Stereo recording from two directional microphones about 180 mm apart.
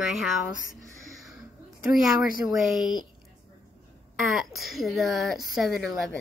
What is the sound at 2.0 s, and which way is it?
A woman's voice, centre (ahead or behind).